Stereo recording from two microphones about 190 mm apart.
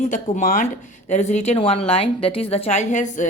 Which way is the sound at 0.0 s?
40° left (ahead or behind).